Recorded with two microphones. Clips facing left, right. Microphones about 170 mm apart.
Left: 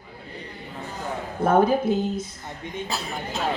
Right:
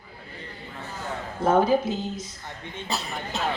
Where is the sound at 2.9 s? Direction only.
Centre (ahead or behind).